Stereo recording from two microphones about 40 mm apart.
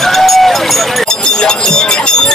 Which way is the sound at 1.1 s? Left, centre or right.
Centre.